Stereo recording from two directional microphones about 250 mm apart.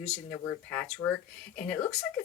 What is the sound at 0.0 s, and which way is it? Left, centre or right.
A woman's voice, centre.